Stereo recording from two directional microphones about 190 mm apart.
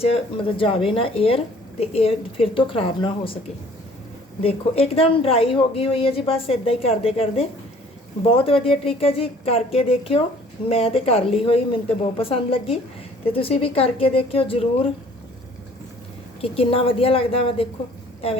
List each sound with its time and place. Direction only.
0.0 s a woman's voice: 30° left (ahead or behind)
4.4 s a woman's voice: 30° left (ahead or behind)
16.4 s a woman's voice: 30° left (ahead or behind)